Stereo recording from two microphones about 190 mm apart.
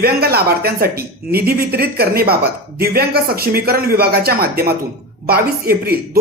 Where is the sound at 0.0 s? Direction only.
55° right (ahead or behind).